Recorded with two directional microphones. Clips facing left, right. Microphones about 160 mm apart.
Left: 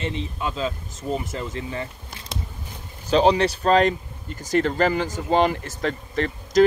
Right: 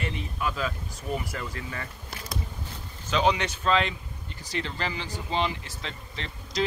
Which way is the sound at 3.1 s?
35° left (ahead or behind).